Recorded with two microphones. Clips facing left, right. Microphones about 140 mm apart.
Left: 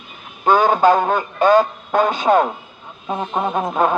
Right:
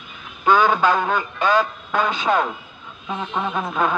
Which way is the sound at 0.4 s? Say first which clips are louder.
Left 3 dB; 45° left (ahead or behind).